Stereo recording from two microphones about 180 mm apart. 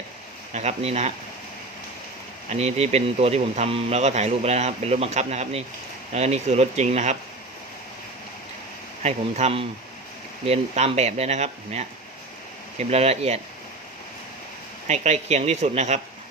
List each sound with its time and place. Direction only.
0.5 s speech: 35° right (ahead or behind)
2.5 s speech: 35° right (ahead or behind)
9.0 s speech: 35° right (ahead or behind)
12.9 s speech: 35° right (ahead or behind)
14.8 s speech: 40° right (ahead or behind)